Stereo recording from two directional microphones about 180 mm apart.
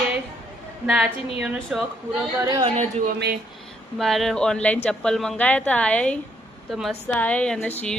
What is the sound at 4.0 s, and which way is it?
A woman's voice, centre (ahead or behind).